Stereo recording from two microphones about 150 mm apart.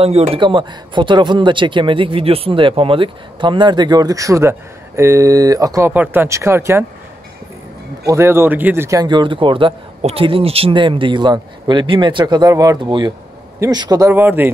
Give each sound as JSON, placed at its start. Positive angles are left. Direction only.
{"t": 0.0, "sound": "speech", "side_deg": -45}
{"t": 0.4, "sound": "speech", "side_deg": -30}
{"t": 8.1, "sound": "a man's voice", "side_deg": -15}